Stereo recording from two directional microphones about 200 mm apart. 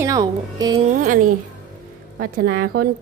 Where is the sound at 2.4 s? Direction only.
50° right (ahead or behind).